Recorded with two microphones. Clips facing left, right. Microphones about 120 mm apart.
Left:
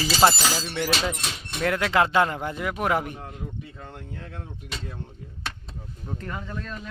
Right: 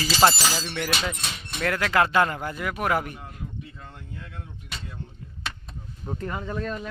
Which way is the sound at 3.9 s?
65° left (ahead or behind).